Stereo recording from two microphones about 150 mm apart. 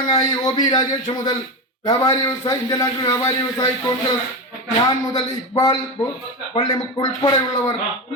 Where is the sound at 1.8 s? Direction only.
20° left (ahead or behind).